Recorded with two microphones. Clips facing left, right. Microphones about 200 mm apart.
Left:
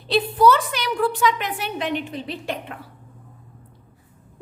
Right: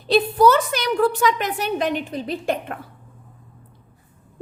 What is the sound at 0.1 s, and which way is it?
A woman's voice, 45° right (ahead or behind).